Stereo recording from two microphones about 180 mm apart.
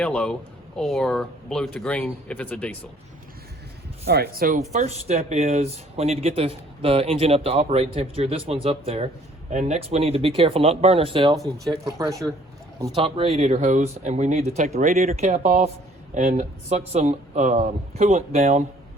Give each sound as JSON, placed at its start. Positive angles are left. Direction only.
{"t": 0.0, "sound": "speech", "side_deg": 5}
{"t": 4.0, "sound": "speech", "side_deg": -60}
{"t": 11.3, "sound": "speech", "side_deg": 0}
{"t": 11.9, "sound": "speech", "side_deg": -20}
{"t": 13.0, "sound": "speech", "side_deg": -30}